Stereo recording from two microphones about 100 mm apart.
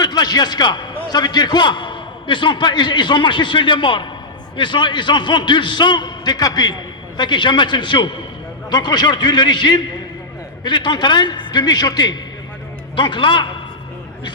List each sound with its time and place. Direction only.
0.0 s a man's voice: 45° left (ahead or behind)